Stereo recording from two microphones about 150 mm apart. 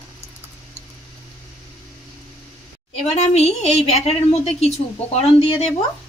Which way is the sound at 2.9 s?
45° left (ahead or behind).